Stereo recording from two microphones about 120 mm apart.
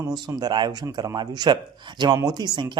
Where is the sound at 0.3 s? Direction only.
35° right (ahead or behind).